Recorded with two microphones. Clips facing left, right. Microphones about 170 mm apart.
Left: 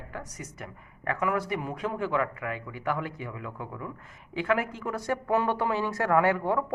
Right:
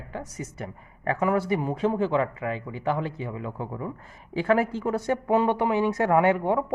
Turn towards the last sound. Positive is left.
turn(degrees=-20)  # may be behind; listen again after turning